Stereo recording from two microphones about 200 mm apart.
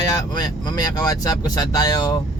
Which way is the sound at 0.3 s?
20° left (ahead or behind).